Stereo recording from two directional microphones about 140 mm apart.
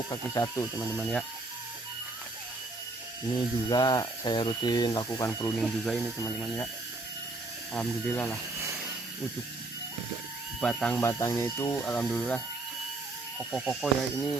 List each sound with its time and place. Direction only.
0.1 s speech: 25° left (ahead or behind)
0.9 s speech: 5° left (ahead or behind)
3.3 s speech: 30° left (ahead or behind)
5.5 s speech: centre (ahead or behind)
7.7 s speech: 10° left (ahead or behind)
10.6 s speech: 5° left (ahead or behind)
11.0 s speech: 25° left (ahead or behind)
13.4 s speech: centre (ahead or behind)